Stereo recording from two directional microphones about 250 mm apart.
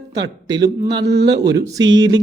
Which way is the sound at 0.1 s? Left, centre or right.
Centre.